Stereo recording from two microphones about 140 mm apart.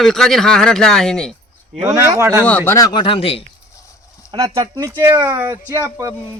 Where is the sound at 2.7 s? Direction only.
30° left (ahead or behind).